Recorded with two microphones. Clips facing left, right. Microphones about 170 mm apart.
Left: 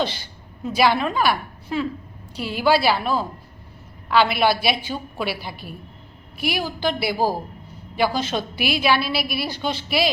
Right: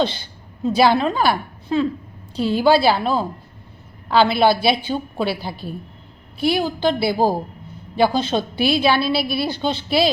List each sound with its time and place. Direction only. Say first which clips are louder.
0.6 s a woman's voice: right 4 dB; 25° right (ahead or behind)